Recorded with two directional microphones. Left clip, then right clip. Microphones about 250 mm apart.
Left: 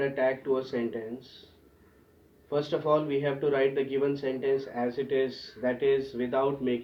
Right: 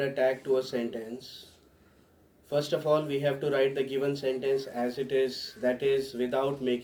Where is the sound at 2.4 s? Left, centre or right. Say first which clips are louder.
Even; right.